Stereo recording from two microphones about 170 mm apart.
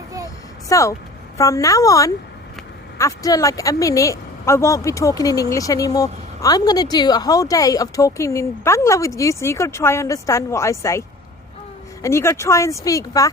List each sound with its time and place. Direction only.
0.7 s a woman's voice: 20° left (ahead or behind)
12.0 s speech: 15° left (ahead or behind)